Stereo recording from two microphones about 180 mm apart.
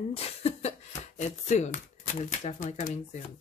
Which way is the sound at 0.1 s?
35° left (ahead or behind).